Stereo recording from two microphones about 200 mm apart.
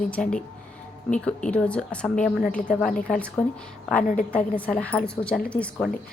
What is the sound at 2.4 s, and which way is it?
Speech, 40° left (ahead or behind).